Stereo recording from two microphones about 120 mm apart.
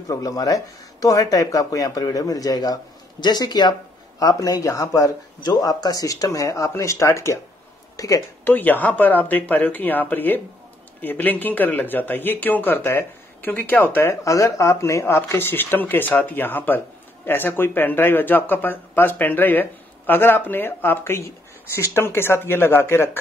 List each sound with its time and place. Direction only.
0.1 s a man's voice: 30° left (ahead or behind)
8.5 s speech: 15° left (ahead or behind)
14.2 s speech: 25° left (ahead or behind)